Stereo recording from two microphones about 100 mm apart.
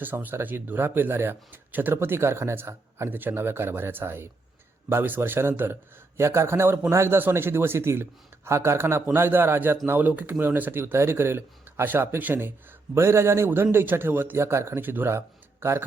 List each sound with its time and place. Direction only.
0.0 s speech: 20° right (ahead or behind)